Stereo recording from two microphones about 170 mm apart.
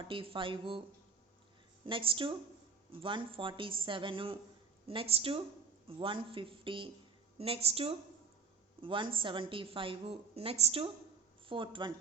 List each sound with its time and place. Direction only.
0.0 s a woman's voice: 30° right (ahead or behind)
1.8 s a woman's voice: 30° right (ahead or behind)